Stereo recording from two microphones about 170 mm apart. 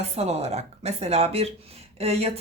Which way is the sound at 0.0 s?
40° right (ahead or behind).